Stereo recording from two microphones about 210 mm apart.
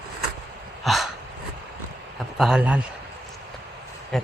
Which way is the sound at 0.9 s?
Centre (ahead or behind).